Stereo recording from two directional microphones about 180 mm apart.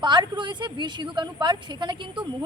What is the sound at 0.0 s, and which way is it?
A woman's voice, 25° right (ahead or behind).